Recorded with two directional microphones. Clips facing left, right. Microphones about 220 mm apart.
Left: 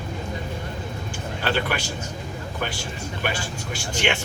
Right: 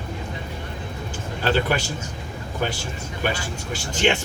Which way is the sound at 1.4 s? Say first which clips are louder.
Right 4 dB; 40° right (ahead or behind).